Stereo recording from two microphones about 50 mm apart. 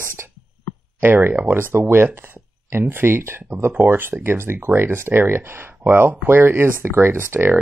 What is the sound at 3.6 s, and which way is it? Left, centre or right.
Speech, right.